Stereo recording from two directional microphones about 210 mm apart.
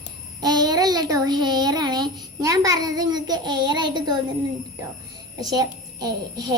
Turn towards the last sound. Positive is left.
turn(degrees=-20)  # may be behind; listen again after turning